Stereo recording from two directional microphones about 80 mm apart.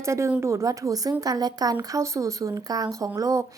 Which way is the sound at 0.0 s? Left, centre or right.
Right.